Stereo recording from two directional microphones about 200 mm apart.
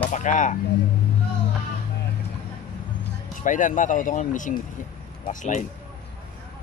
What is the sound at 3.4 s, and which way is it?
Speech, 40° left (ahead or behind).